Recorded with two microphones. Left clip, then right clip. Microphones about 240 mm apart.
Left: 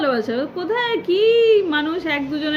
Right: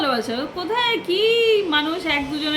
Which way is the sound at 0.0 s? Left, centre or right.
Centre.